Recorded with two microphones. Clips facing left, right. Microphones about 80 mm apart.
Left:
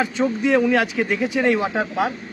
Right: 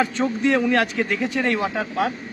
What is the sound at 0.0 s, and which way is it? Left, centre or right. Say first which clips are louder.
A man's voice: even; centre.